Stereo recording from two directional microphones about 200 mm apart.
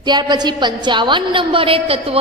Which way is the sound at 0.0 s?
20° right (ahead or behind).